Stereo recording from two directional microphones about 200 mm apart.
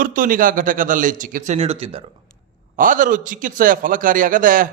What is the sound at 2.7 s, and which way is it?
A man's voice, 40° right (ahead or behind).